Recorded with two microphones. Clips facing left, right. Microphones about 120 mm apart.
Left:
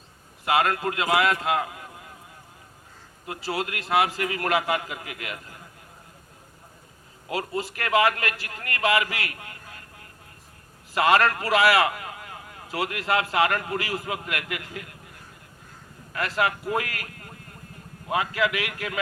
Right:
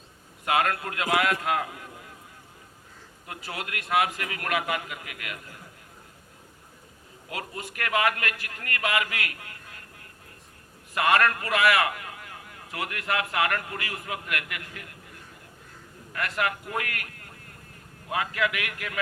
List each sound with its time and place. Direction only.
0.4 s a man's voice: 30° left (ahead or behind)
3.2 s a man's voice: 30° left (ahead or behind)
7.3 s a man's voice: 30° left (ahead or behind)
10.9 s a man's voice: 30° left (ahead or behind)
16.1 s a man's voice: 30° left (ahead or behind)